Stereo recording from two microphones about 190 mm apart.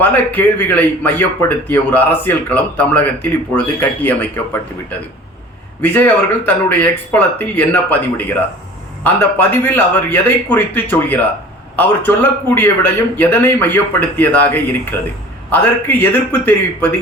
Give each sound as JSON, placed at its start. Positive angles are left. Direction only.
{"t": 0.0, "sound": "a man's voice", "side_deg": 10}
{"t": 9.0, "sound": "a man's voice", "side_deg": 10}